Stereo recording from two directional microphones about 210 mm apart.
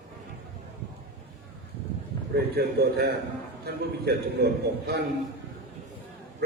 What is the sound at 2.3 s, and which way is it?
A man's voice, 50° right (ahead or behind).